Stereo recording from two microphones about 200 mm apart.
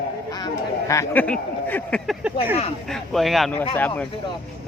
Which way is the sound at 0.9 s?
10° left (ahead or behind).